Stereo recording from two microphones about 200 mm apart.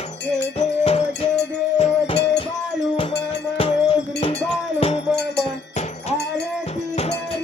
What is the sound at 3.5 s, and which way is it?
Music, 30° left (ahead or behind).